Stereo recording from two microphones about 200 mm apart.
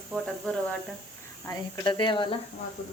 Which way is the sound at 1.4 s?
20° left (ahead or behind).